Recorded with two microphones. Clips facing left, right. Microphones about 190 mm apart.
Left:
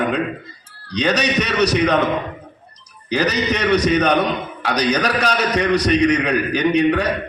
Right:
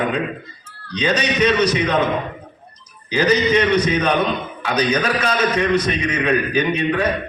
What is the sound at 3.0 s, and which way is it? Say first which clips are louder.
A man's voice: right 2 dB; 70° left (ahead or behind).